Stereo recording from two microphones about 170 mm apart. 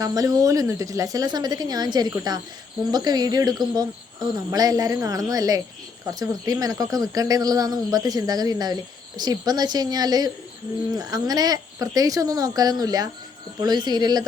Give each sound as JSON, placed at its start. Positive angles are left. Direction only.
{"t": 0.0, "sound": "speech", "side_deg": -20}
{"t": 4.5, "sound": "speech", "side_deg": -20}